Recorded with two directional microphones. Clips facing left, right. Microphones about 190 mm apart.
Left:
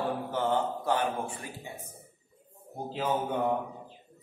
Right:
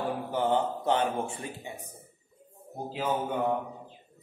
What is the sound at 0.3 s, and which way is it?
A man's voice, 15° right (ahead or behind).